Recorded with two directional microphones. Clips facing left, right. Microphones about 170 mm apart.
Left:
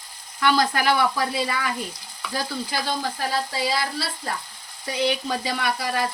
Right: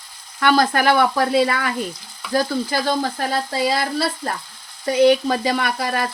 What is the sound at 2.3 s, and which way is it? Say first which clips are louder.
Frying: right 8 dB; 45° right (ahead or behind).